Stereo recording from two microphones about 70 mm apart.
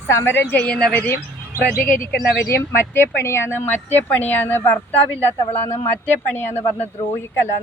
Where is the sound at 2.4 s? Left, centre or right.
Left.